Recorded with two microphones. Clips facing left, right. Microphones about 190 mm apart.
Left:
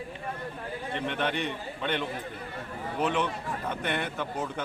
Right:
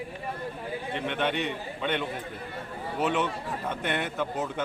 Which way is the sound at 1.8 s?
5° right (ahead or behind).